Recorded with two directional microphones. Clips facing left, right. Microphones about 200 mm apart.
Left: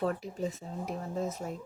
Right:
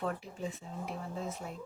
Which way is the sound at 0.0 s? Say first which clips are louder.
Left 5 dB; 40° left (ahead or behind).